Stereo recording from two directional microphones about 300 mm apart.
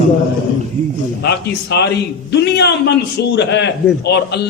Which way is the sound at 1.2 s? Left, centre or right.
Left.